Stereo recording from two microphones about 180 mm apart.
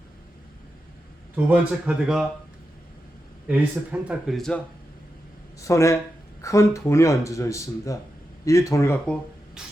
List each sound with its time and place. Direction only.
1.5 s speech: 5° right (ahead or behind)
3.4 s speech: 10° right (ahead or behind)
5.5 s speech: 15° left (ahead or behind)